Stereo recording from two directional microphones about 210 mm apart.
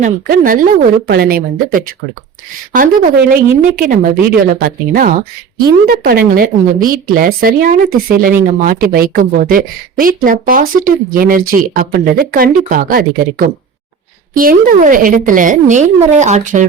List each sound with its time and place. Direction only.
0.0 s speech: 40° right (ahead or behind)